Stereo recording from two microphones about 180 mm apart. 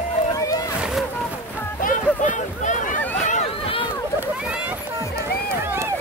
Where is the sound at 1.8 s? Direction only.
45° left (ahead or behind).